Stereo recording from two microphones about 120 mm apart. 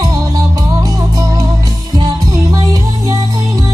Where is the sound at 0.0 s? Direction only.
30° right (ahead or behind).